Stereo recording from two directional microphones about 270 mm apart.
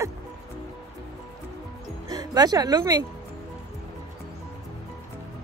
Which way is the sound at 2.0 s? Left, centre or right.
Centre.